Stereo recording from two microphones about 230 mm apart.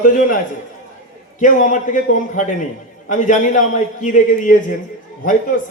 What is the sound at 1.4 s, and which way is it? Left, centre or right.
A man's voice, left.